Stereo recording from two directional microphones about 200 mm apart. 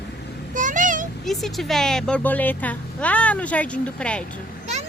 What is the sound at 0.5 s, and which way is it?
Vehicle, 40° right (ahead or behind).